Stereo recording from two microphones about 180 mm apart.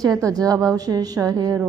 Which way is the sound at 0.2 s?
20° right (ahead or behind).